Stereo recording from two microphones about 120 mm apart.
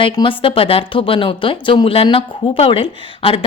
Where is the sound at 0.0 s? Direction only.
45° left (ahead or behind).